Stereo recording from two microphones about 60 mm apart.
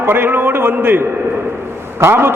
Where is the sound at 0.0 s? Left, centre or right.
Right.